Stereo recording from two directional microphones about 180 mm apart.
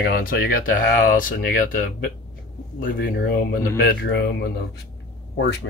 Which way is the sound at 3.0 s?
70° left (ahead or behind).